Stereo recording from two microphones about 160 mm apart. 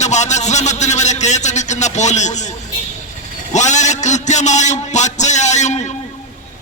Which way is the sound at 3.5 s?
50° left (ahead or behind).